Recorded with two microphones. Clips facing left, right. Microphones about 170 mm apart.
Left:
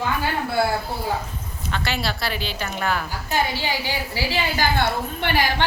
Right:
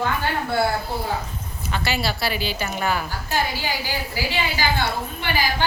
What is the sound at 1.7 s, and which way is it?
Speech, 5° right (ahead or behind).